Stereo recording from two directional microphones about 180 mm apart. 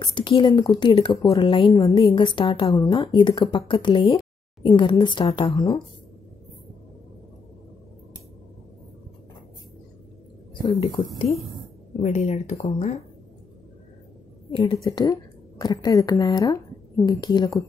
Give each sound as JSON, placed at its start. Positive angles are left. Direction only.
{"t": 0.0, "sound": "a woman's voice", "side_deg": 30}
{"t": 1.7, "sound": "speech", "side_deg": 15}
{"t": 2.0, "sound": "a woman's voice", "side_deg": 30}
{"t": 10.5, "sound": "speech", "side_deg": 25}
{"t": 12.0, "sound": "speech", "side_deg": 35}
{"t": 14.5, "sound": "a woman's voice", "side_deg": 30}
{"t": 14.9, "sound": "a woman's voice", "side_deg": 20}